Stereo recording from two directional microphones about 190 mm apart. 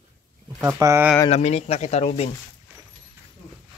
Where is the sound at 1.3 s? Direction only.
35° left (ahead or behind).